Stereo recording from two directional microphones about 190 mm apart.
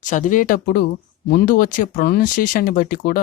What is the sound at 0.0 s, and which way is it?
Speech, 45° left (ahead or behind).